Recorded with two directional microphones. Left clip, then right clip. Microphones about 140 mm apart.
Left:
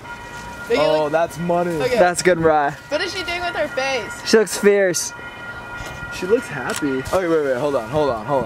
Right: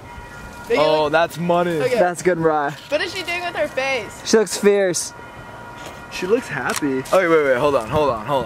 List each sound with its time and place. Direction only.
0.7 s speech: centre (ahead or behind)
0.9 s speech: 25° right (ahead or behind)
1.8 s speech: centre (ahead or behind)
2.2 s speech: 15° left (ahead or behind)
2.5 s speech: centre (ahead or behind)
6.1 s speech: 30° right (ahead or behind)